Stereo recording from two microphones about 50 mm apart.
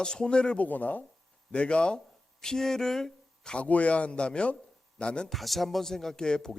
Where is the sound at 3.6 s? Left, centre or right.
Left.